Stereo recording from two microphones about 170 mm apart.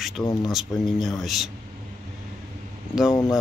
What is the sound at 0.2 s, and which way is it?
Speech, 25° left (ahead or behind).